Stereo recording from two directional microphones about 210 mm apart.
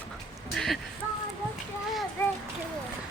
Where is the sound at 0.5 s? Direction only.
Centre (ahead or behind).